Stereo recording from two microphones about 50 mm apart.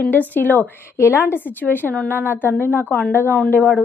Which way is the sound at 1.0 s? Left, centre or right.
Left.